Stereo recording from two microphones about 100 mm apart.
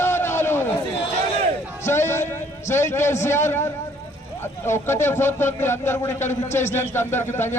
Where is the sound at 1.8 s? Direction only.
25° left (ahead or behind).